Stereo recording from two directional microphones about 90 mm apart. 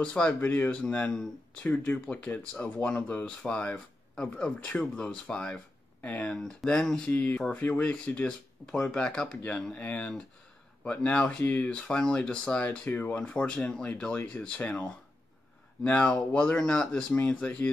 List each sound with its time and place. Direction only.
0.0 s speech: 10° left (ahead or behind)
6.3 s speech: 5° left (ahead or behind)
7.1 s speech: 15° left (ahead or behind)